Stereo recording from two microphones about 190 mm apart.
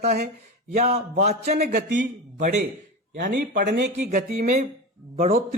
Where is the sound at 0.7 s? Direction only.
35° right (ahead or behind).